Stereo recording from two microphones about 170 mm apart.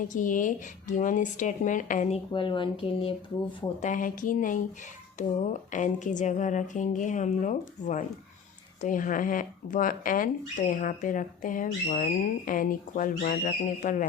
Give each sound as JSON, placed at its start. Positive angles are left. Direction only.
{"t": 0.1, "sound": "speech", "side_deg": 50}
{"t": 3.8, "sound": "speech", "side_deg": 50}